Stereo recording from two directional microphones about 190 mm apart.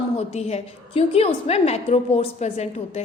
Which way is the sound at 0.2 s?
35° left (ahead or behind).